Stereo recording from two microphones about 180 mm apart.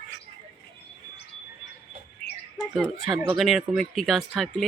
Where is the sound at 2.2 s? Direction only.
60° left (ahead or behind).